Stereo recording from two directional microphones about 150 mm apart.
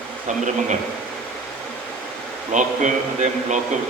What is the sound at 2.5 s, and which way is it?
Speech, 55° right (ahead or behind).